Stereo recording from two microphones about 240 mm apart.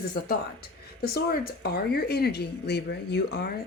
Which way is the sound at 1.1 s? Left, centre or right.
Left.